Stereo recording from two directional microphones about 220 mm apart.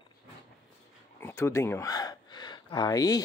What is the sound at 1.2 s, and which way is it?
Gasp, 10° left (ahead or behind).